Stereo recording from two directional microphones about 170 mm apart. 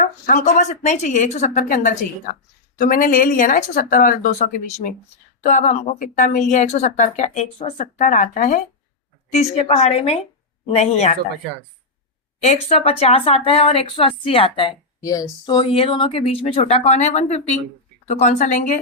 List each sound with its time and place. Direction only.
0.0 s a woman's voice: 50° left (ahead or behind)
12.6 s a woman's voice: 35° left (ahead or behind)